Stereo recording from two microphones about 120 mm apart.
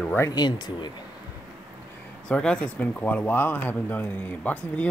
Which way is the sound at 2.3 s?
5° left (ahead or behind).